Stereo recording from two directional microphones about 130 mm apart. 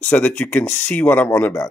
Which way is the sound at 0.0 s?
10° left (ahead or behind).